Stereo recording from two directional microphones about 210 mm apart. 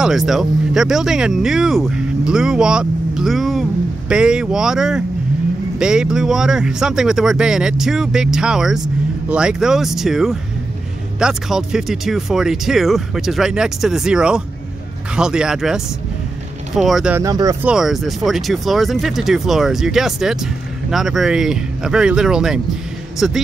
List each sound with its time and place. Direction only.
0.0 s speech: centre (ahead or behind)
17.2 s speech: 15° right (ahead or behind)
17.6 s speech: centre (ahead or behind)